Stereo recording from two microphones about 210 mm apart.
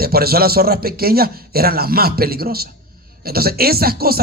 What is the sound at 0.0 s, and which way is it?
Speech, 45° right (ahead or behind).